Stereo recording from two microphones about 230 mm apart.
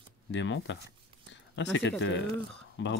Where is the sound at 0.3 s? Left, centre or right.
Left.